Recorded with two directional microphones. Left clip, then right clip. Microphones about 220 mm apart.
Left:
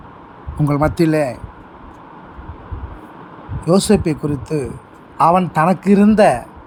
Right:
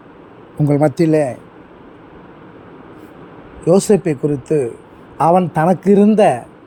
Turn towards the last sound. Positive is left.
turn(degrees=10)  # may be behind; listen again after turning